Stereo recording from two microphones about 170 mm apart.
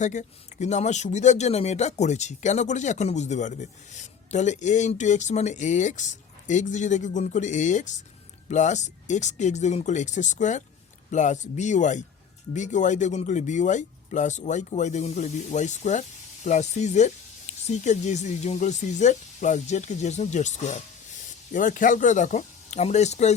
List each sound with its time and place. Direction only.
0.0 s a man's voice: 45° left (ahead or behind)